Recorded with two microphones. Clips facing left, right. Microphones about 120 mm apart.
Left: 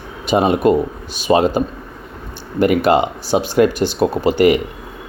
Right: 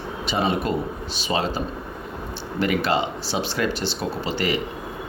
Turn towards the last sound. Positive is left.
turn(degrees=50)  # may be behind; listen again after turning